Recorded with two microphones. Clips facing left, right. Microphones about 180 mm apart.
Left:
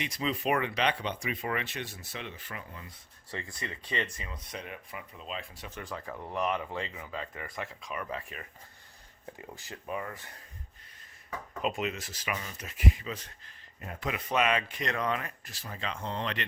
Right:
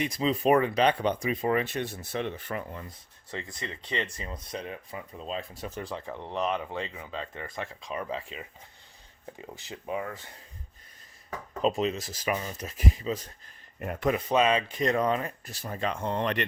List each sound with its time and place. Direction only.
0.2 s speech: 35° right (ahead or behind); by 2.8 s 50° right (ahead or behind)
3.3 s speech: 20° right (ahead or behind); by 5.9 s 40° right (ahead or behind)
6.1 s speech: 25° right (ahead or behind)
11.6 s speech: 30° right (ahead or behind)
13.8 s speech: 60° right (ahead or behind)
14.1 s speech: 30° right (ahead or behind); by 16.5 s 50° right (ahead or behind)